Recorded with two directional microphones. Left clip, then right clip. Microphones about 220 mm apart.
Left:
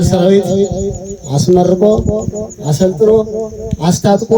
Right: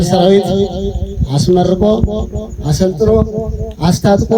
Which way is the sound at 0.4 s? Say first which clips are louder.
Left 1 dB; 20° right (ahead or behind).